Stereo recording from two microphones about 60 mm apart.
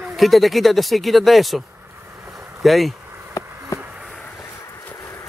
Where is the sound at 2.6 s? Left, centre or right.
Centre.